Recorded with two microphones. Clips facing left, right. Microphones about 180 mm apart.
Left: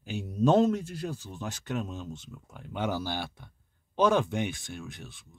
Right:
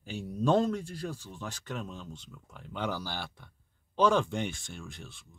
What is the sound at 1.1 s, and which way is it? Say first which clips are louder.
Speech: left 3 dB; 20° left (ahead or behind).